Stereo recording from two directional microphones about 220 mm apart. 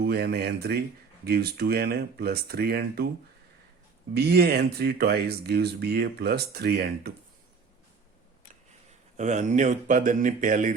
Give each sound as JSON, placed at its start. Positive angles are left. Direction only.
{"t": 0.0, "sound": "speech", "side_deg": -45}
{"t": 4.1, "sound": "speech", "side_deg": -45}
{"t": 9.1, "sound": "speech", "side_deg": -30}